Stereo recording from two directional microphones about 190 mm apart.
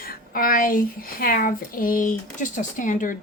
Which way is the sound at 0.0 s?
50° left (ahead or behind).